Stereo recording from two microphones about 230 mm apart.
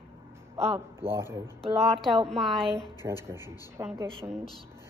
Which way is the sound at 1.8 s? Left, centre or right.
Centre.